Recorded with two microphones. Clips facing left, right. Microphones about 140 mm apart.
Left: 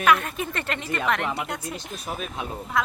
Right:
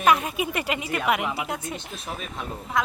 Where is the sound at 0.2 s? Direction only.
5° right (ahead or behind).